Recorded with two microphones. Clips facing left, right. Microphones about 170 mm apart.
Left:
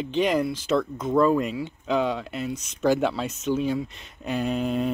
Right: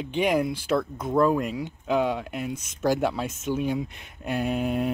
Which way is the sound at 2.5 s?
50° right (ahead or behind).